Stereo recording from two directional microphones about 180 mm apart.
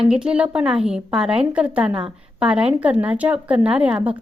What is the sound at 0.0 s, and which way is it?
A woman's voice, 5° right (ahead or behind).